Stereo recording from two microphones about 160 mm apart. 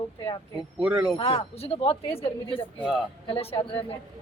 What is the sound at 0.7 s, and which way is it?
Speech, 5° right (ahead or behind).